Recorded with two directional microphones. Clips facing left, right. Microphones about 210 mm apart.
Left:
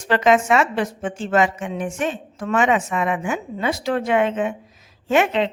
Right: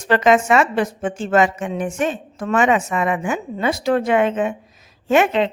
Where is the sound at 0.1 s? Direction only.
45° right (ahead or behind).